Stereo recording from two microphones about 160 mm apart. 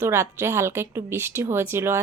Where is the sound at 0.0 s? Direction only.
15° right (ahead or behind).